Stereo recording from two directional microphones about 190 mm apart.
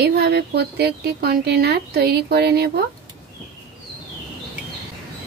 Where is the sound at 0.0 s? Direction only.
60° right (ahead or behind).